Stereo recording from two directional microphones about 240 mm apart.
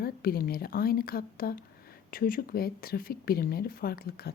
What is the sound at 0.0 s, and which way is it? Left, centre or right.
Speech, left.